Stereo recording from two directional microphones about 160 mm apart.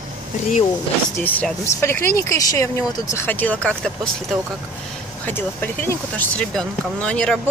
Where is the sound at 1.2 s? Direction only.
10° left (ahead or behind).